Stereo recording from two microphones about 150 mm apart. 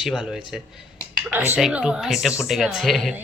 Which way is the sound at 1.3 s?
15° right (ahead or behind).